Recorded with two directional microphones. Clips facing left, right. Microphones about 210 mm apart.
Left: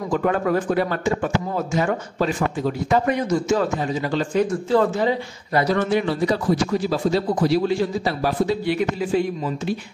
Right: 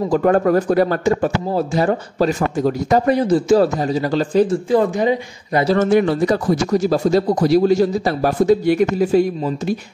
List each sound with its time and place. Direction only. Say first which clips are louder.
0.1 s speech: right 5 dB; 45° right (ahead or behind)
4.6 s speech: right 3 dB; 15° right (ahead or behind)
5.8 s speech: right 6 dB; 50° right (ahead or behind)